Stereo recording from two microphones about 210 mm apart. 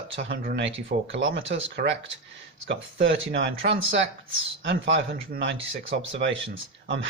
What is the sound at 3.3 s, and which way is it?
Speech, 60° right (ahead or behind).